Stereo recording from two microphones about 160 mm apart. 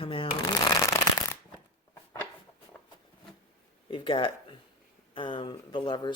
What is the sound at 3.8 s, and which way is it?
Speech, 30° left (ahead or behind).